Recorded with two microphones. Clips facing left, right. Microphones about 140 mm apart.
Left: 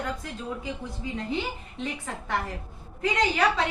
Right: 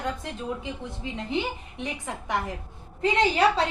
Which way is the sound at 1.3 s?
15° right (ahead or behind).